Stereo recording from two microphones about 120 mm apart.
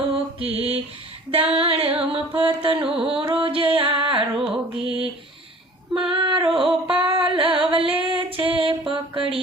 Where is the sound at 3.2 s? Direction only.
50° right (ahead or behind).